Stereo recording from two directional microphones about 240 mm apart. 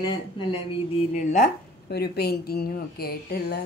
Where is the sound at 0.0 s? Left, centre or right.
Centre.